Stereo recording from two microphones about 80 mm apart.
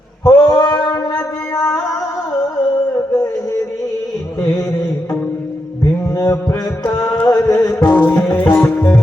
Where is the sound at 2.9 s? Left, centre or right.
Left.